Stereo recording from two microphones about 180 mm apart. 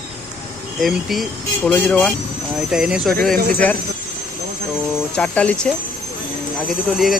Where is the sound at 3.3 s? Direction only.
55° right (ahead or behind).